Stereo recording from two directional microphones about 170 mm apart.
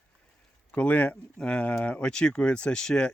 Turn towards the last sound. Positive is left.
turn(degrees=5)  # may be behind; listen again after turning